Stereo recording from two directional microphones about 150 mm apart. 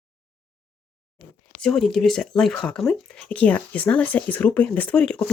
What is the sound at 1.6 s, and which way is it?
Speech, 5° left (ahead or behind).